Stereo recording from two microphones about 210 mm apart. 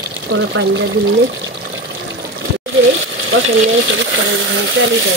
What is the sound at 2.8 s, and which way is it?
Speech, 65° right (ahead or behind).